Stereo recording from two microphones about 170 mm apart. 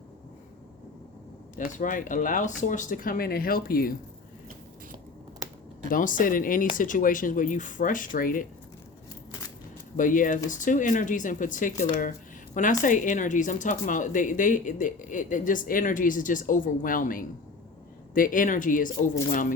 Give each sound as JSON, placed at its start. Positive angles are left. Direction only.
{"t": 1.5, "sound": "speech", "side_deg": 50}
{"t": 5.9, "sound": "speech", "side_deg": 50}
{"t": 10.0, "sound": "speech", "side_deg": 50}